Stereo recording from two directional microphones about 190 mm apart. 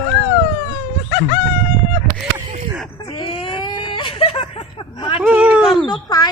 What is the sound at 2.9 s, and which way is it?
Baby cry, 20° left (ahead or behind).